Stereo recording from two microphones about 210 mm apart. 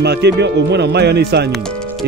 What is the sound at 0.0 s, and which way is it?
Speech, 50° right (ahead or behind).